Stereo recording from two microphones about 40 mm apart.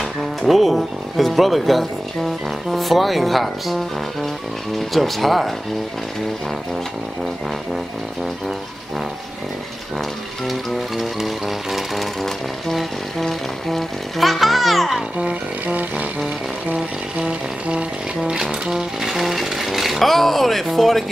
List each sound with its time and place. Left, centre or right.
0.0 s speech: centre
7.7 s speech: centre
9.9 s speech: centre
15.0 s music: right
15.6 s music: right
17.3 s music: right
18.5 s speech: centre